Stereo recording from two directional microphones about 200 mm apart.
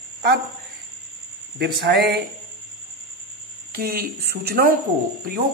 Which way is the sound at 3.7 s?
50° right (ahead or behind).